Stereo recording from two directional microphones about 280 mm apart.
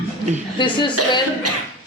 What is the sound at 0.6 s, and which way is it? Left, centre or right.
Speech, centre.